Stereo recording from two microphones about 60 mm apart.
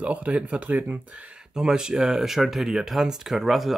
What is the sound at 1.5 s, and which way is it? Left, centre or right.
Speech, centre.